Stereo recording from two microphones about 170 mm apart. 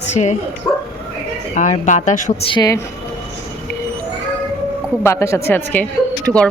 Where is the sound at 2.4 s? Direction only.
30° left (ahead or behind).